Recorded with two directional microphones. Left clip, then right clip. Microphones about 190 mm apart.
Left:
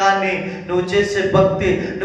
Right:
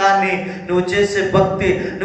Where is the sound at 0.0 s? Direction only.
20° right (ahead or behind).